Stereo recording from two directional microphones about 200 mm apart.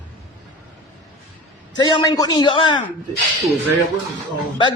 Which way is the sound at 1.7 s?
20° left (ahead or behind).